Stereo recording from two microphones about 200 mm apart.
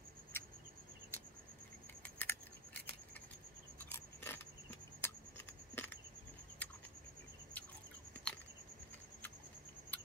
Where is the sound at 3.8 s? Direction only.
10° left (ahead or behind).